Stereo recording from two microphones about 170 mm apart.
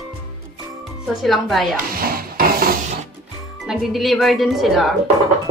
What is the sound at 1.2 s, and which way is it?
Speech, centre (ahead or behind).